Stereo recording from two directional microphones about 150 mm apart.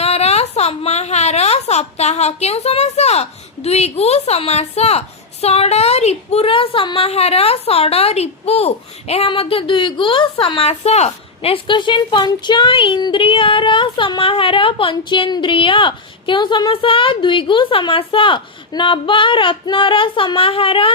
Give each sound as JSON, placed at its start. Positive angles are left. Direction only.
{"t": 0.0, "sound": "a woman's voice", "side_deg": 45}